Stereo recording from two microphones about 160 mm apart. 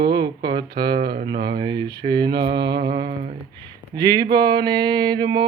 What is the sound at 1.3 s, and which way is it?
Mantra, 30° right (ahead or behind).